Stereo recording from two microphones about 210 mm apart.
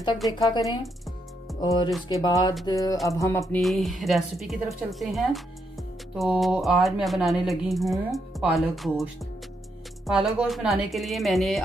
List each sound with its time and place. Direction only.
0.3 s speech: 20° left (ahead or behind)
2.0 s music: 15° left (ahead or behind)
3.6 s speech: centre (ahead or behind)